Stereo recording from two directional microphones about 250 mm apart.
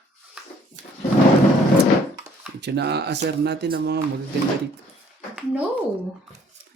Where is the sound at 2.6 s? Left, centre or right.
Right.